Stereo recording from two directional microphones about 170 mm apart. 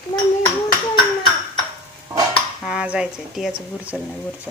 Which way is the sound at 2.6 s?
5° right (ahead or behind).